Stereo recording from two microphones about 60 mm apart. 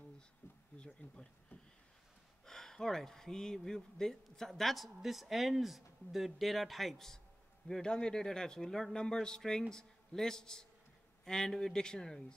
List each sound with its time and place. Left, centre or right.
0.4 s bee: left
0.7 s speech: centre